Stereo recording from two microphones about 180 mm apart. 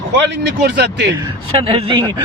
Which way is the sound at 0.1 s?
70° right (ahead or behind).